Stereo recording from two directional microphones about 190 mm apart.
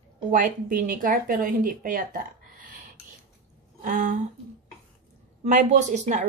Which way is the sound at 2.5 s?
45° right (ahead or behind).